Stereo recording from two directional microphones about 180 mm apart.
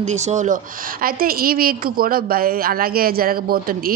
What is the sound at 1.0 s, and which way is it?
A woman's voice, 55° right (ahead or behind).